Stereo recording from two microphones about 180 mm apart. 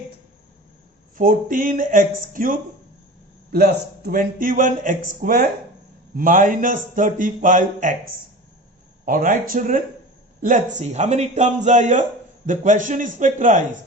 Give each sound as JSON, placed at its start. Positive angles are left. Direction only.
{"t": 1.1, "sound": "a man's voice", "side_deg": -50}
{"t": 9.0, "sound": "a man's voice", "side_deg": -50}